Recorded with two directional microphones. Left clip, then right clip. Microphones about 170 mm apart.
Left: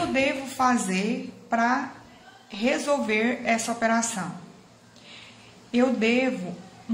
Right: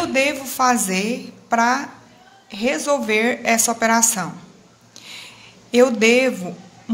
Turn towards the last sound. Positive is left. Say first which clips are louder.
# right 8 dB
turn(degrees=-40)  # may be behind; listen again after turning